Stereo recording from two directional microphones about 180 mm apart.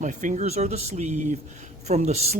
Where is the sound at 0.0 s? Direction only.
45° right (ahead or behind).